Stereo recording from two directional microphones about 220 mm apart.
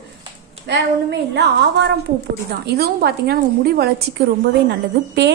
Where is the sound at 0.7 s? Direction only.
50° right (ahead or behind).